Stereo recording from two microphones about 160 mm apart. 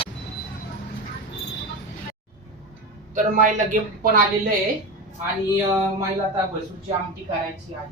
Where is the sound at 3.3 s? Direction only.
55° right (ahead or behind).